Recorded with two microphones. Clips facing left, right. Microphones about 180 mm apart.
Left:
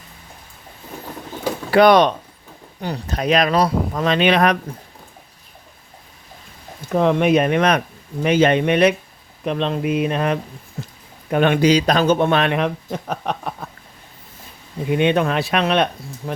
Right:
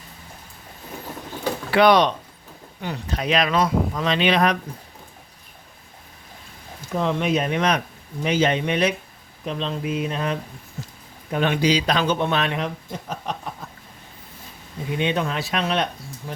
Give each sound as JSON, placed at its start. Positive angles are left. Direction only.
{"t": 1.7, "sound": "speech", "side_deg": 45}
{"t": 6.9, "sound": "speech", "side_deg": 60}
{"t": 14.8, "sound": "speech", "side_deg": 60}